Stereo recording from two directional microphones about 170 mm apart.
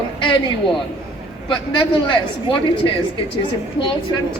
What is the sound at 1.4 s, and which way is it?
Speech, 25° left (ahead or behind).